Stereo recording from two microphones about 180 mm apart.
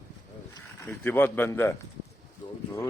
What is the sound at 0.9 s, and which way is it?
Speech, 10° left (ahead or behind).